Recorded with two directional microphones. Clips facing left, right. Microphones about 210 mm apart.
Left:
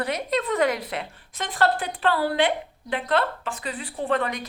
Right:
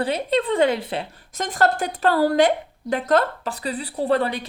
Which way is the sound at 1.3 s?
45° right (ahead or behind).